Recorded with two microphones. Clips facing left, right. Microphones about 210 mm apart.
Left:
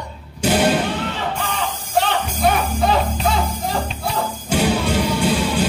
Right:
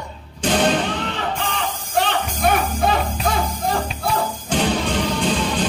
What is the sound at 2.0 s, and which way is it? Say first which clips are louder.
Music: left 1 dB; 50° right (ahead or behind).